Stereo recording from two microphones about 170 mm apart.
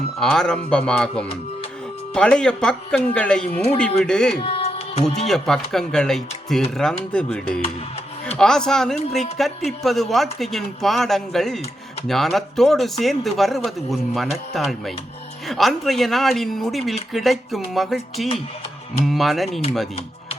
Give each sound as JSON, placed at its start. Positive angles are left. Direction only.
{"t": 0.2, "sound": "speech", "side_deg": 5}
{"t": 4.4, "sound": "music", "side_deg": 35}
{"t": 5.3, "sound": "speech", "side_deg": 0}